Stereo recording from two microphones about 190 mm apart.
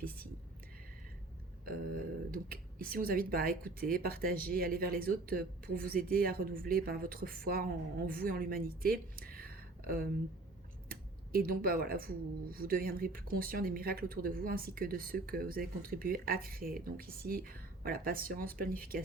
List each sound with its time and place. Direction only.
1.6 s speech: 50° right (ahead or behind)